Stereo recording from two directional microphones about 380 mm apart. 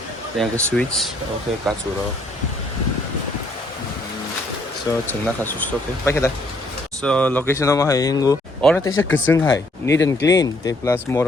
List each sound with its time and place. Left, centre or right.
0.3 s speech: centre
4.9 s speech: centre
8.9 s speech: left
9.3 s speech: centre